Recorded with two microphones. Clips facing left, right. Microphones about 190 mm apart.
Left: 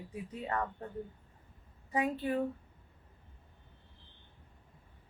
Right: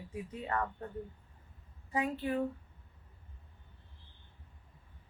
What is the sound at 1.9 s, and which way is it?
Speech, 30° left (ahead or behind).